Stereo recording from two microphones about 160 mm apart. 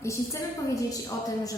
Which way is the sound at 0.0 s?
20° left (ahead or behind).